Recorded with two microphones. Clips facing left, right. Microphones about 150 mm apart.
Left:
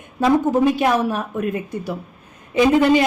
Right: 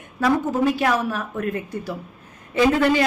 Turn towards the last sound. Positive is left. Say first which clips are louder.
# left 3 dB
turn(degrees=15)  # may be behind; listen again after turning